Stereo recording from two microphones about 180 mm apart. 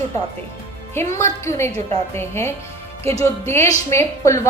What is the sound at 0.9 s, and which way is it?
A woman's voice, 15° left (ahead or behind).